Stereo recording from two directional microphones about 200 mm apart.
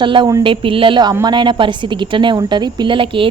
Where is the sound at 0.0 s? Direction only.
25° right (ahead or behind).